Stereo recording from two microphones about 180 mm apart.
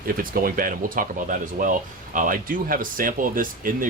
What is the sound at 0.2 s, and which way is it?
Speech, 50° right (ahead or behind).